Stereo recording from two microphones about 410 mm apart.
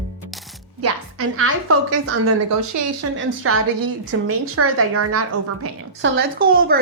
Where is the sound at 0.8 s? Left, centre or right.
Right.